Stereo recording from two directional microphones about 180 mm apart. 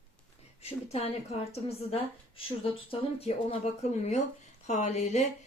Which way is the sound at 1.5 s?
35° left (ahead or behind).